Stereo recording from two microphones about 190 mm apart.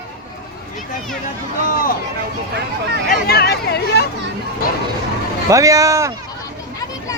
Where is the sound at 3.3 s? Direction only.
55° left (ahead or behind).